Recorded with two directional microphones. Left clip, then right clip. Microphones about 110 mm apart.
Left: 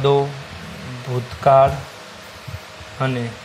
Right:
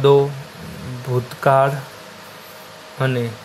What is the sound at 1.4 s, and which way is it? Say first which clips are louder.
Speech: left 3 dB; 40° right (ahead or behind).